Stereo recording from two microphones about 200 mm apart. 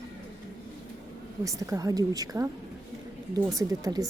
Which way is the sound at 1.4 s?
15° right (ahead or behind).